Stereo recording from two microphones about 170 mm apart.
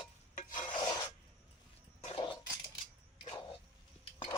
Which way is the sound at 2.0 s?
40° left (ahead or behind).